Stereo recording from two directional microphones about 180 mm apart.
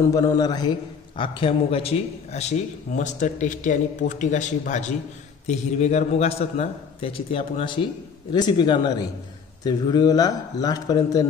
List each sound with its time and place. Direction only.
0.1 s a man's voice: 20° left (ahead or behind)